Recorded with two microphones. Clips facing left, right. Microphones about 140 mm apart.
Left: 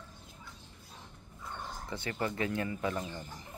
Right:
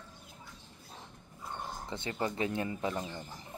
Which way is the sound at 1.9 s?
20° right (ahead or behind).